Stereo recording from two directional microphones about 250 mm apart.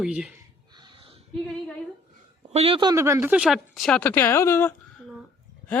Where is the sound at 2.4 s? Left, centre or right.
Right.